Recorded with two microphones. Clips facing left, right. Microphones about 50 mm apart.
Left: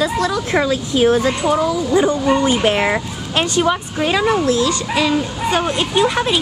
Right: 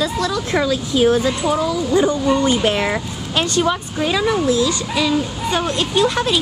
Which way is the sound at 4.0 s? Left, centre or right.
Left.